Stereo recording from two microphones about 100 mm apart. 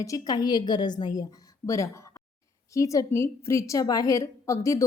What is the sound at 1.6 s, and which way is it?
A woman's voice, 30° left (ahead or behind).